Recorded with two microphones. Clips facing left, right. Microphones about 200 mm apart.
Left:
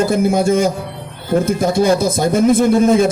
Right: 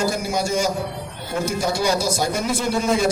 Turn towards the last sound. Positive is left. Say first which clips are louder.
# left 9 dB
turn(degrees=50)  # may be behind; listen again after turning